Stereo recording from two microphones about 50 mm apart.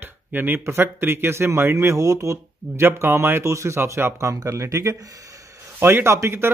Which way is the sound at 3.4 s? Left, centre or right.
Right.